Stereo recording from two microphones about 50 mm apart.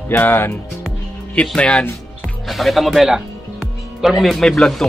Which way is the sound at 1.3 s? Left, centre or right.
Left.